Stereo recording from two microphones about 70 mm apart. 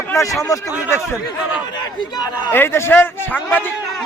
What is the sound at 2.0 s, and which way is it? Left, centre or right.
Speech, left.